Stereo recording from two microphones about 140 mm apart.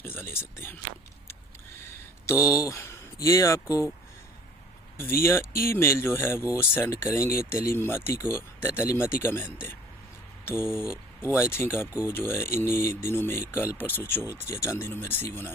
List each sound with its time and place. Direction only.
0.0 s speech: 15° left (ahead or behind)
2.2 s speech: 20° left (ahead or behind)
4.9 s speech: 20° left (ahead or behind)